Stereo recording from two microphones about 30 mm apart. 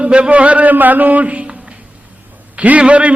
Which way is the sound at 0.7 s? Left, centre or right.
Right.